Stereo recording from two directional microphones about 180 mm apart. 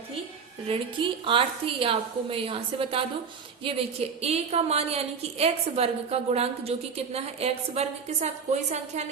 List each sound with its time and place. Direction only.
0.7 s a woman's voice: 30° right (ahead or behind)